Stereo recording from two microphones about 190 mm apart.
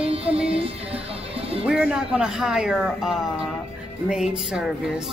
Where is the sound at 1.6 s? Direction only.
5° right (ahead or behind).